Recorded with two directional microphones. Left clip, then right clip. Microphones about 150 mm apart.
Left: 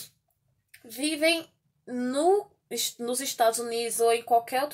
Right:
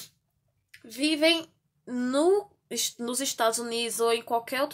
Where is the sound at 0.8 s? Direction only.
30° right (ahead or behind).